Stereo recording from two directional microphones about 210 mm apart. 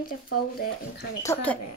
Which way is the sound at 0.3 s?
45° left (ahead or behind).